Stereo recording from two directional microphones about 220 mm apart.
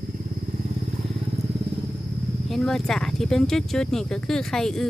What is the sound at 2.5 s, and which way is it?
Speech, centre (ahead or behind).